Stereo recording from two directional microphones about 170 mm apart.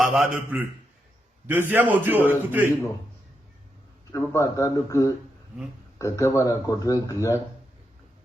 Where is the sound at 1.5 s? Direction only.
10° right (ahead or behind).